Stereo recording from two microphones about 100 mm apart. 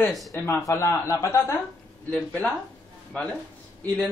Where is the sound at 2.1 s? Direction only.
10° left (ahead or behind).